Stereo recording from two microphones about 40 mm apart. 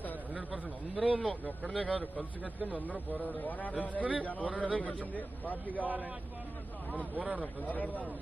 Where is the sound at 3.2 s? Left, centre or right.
Left.